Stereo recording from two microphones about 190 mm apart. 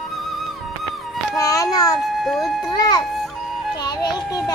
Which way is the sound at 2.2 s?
Centre (ahead or behind).